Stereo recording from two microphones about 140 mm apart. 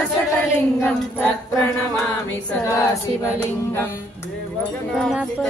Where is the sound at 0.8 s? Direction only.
15° left (ahead or behind).